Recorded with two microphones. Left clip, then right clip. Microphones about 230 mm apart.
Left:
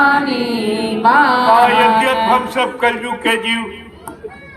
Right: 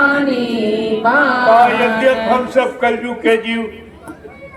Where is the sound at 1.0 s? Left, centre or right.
Left.